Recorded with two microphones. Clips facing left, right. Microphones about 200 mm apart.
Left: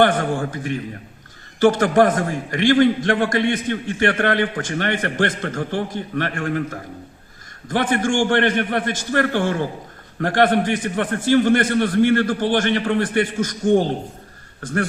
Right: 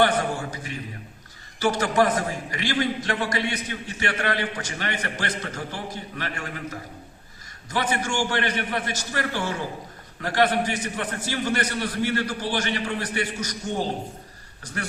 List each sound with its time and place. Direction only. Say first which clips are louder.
0.0 s a man's voice: left 5 dB; 50° left (ahead or behind)